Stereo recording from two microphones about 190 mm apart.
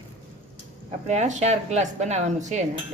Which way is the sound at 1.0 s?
35° right (ahead or behind).